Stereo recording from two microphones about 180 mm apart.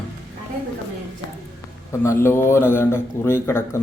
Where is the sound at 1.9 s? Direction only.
15° left (ahead or behind).